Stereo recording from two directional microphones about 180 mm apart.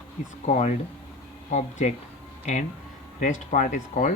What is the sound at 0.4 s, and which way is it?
A man's voice, 45° left (ahead or behind).